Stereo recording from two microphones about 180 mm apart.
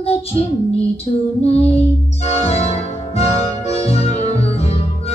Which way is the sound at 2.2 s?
35° left (ahead or behind).